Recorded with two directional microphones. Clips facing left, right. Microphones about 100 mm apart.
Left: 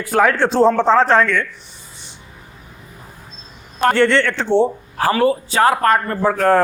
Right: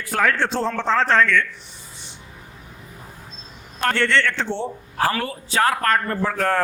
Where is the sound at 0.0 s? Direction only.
15° left (ahead or behind).